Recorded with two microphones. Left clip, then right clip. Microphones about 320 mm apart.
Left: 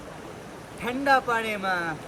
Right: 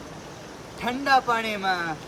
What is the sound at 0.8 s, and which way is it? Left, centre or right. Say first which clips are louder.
Speech: right 1 dB; centre.